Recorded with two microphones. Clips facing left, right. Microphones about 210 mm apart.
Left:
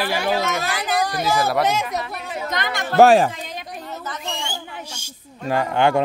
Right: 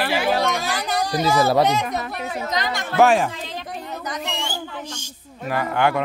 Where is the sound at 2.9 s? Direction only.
35° left (ahead or behind).